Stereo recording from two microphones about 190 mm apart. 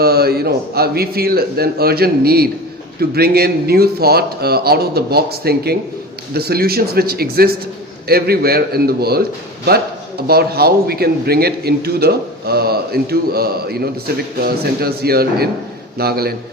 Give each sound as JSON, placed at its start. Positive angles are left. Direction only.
{"t": 0.0, "sound": "a man's voice", "side_deg": -55}
{"t": 10.2, "sound": "a man's voice", "side_deg": -55}